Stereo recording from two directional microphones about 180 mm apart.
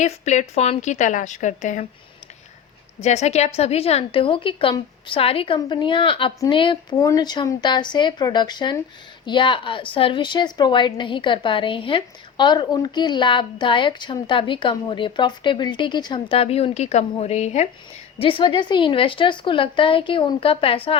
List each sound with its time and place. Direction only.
0.0 s a woman's voice: 40° left (ahead or behind)
3.0 s a woman's voice: 40° left (ahead or behind)